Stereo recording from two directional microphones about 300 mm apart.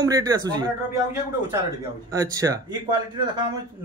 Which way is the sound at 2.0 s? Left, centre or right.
Centre.